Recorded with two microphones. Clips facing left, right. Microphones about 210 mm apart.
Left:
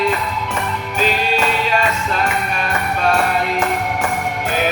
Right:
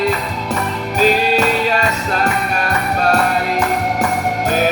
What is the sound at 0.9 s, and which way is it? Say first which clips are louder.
Music: right 5 dB; 40° right (ahead or behind).